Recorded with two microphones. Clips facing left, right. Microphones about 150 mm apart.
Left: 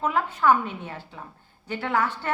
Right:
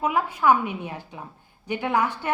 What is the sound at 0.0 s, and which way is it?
A woman's voice, 10° right (ahead or behind).